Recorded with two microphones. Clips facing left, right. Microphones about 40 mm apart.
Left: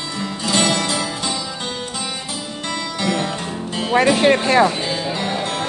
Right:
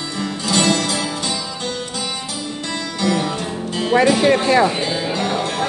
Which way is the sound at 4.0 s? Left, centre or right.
Left.